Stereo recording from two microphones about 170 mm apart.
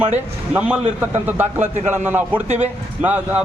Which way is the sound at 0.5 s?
5° right (ahead or behind).